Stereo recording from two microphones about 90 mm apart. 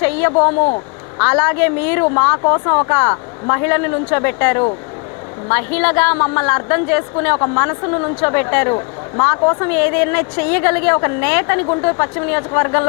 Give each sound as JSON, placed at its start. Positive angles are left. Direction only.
{"t": 0.0, "sound": "a woman's voice", "side_deg": 25}